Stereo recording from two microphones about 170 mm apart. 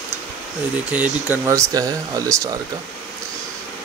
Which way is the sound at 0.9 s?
10° right (ahead or behind).